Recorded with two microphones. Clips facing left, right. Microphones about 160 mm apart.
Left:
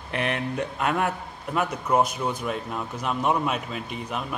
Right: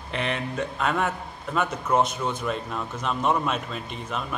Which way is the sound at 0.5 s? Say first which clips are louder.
Right 1 dB; 10° left (ahead or behind).